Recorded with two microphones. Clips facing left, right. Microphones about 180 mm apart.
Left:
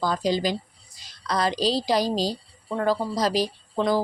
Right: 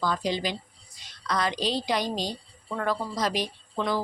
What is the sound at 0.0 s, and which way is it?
A woman's voice, 40° left (ahead or behind).